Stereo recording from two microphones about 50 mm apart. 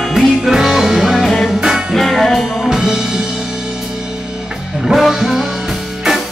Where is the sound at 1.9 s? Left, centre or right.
Centre.